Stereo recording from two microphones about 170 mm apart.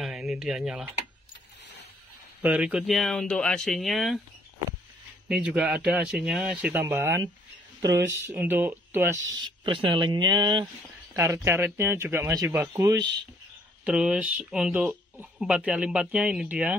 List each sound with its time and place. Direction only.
0.0 s speech: centre (ahead or behind)
2.4 s speech: 10° right (ahead or behind)
5.3 s speech: 5° right (ahead or behind)
9.7 s speech: 30° right (ahead or behind)
11.1 s speech: 15° right (ahead or behind)
12.8 s speech: 20° right (ahead or behind)
13.8 s speech: 5° right (ahead or behind)